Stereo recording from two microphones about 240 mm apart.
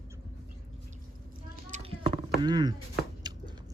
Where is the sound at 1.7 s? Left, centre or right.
Right.